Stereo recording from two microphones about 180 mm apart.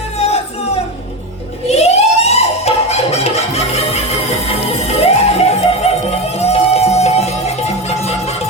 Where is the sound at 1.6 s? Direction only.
35° left (ahead or behind).